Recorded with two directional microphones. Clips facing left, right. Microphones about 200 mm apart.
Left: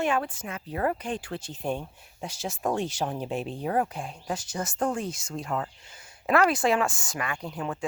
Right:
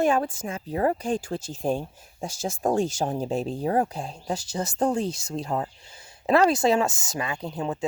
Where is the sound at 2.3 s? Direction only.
45° right (ahead or behind).